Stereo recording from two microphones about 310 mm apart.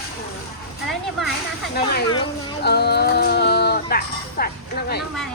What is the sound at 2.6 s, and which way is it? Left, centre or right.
Speech, left.